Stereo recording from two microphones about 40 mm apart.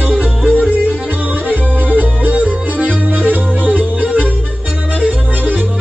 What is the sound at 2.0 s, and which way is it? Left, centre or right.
Music, right.